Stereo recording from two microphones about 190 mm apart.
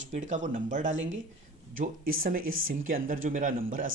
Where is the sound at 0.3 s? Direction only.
40° right (ahead or behind).